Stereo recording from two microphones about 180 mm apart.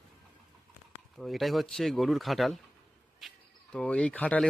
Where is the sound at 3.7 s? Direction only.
5° left (ahead or behind).